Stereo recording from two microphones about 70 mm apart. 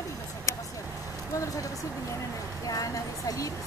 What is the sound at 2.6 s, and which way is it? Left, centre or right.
Speech, left.